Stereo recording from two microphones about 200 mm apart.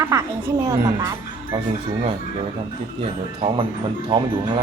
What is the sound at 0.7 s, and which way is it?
Speech, 15° right (ahead or behind).